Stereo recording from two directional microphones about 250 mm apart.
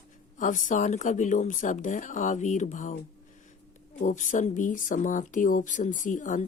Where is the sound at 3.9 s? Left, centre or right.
Left.